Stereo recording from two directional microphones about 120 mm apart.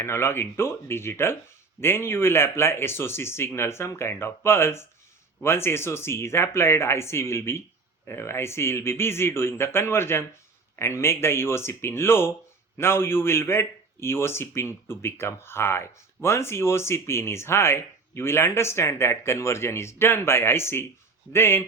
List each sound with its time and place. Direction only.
0.0 s a man's voice: 20° left (ahead or behind)